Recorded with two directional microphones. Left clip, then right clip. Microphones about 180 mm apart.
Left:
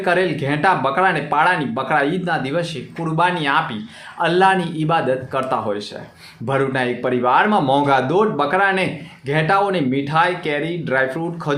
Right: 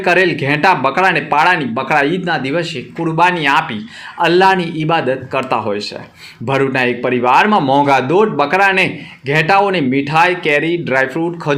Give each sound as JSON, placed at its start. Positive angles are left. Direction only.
{"t": 0.0, "sound": "a man's voice", "side_deg": -15}